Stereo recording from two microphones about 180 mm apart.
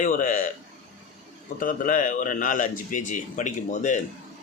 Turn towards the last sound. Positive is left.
turn(degrees=45)  # may be behind; listen again after turning